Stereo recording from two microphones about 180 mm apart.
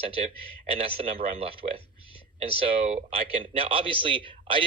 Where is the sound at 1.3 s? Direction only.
35° right (ahead or behind).